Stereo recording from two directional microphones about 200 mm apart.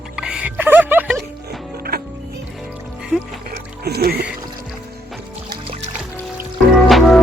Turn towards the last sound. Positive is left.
turn(degrees=0)  # may be behind; listen again after turning